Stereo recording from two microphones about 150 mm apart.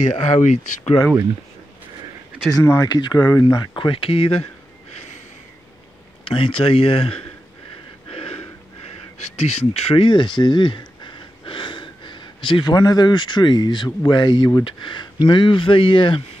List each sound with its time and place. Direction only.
0.0 s speech: 50° left (ahead or behind)
2.6 s speech: 20° left (ahead or behind); by 4.5 s 35° left (ahead or behind)
6.2 s speech: 35° left (ahead or behind)
8.1 s a sound: 40° left (ahead or behind)
9.4 s speech: 45° left (ahead or behind)